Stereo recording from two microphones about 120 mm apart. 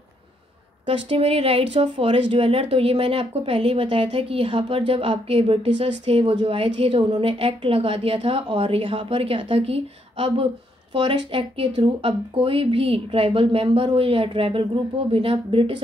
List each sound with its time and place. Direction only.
0.8 s speech: 50° right (ahead or behind)